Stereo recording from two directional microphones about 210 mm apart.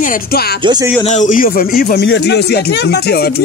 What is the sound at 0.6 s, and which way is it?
Music, 20° right (ahead or behind).